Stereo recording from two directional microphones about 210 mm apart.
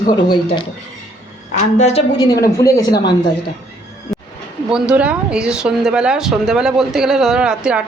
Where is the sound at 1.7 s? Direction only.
30° left (ahead or behind).